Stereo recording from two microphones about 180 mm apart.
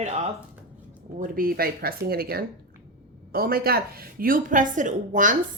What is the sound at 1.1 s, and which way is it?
A woman's voice, 50° right (ahead or behind).